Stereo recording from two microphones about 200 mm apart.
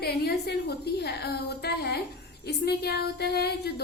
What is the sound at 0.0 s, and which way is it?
A woman's voice, 50° left (ahead or behind).